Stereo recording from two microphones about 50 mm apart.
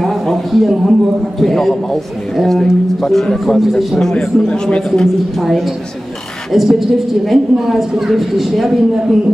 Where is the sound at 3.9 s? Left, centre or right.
Centre.